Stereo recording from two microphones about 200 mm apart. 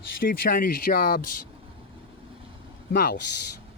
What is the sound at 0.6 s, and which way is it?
Speech, 45° left (ahead or behind).